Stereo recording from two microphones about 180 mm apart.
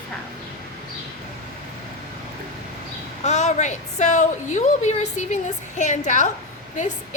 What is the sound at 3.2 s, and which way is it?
A woman's voice, 40° left (ahead or behind).